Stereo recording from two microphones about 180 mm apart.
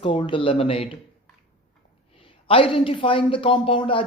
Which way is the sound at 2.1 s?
30° left (ahead or behind).